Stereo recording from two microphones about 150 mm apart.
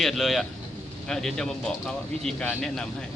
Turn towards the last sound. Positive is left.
turn(degrees=5)  # may be behind; listen again after turning